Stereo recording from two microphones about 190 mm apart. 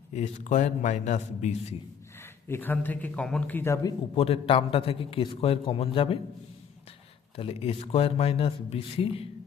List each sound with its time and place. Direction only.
0.1 s a man's voice: 40° left (ahead or behind)
2.1 s a man's voice: 10° left (ahead or behind)
4.1 s a man's voice: 30° left (ahead or behind)
7.3 s a man's voice: 30° left (ahead or behind)